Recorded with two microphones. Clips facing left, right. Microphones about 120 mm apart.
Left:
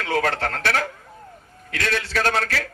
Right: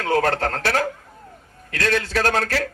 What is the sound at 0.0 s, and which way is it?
A man's voice, 40° right (ahead or behind).